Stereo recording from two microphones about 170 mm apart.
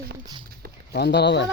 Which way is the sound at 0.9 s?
80° left.